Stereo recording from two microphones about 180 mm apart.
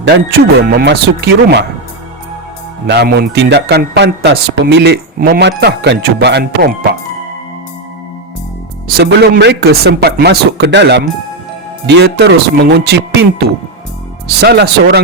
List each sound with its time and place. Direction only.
0.0 s speech: 65° right (ahead or behind)
2.8 s a man's voice: 70° right (ahead or behind)
9.0 s a man's voice: 60° right (ahead or behind)